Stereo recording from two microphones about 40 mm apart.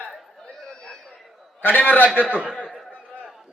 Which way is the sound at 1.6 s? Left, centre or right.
Left.